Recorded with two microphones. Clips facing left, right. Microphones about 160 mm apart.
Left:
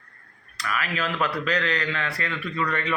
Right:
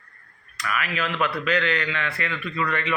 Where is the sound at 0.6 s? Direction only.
35° left (ahead or behind).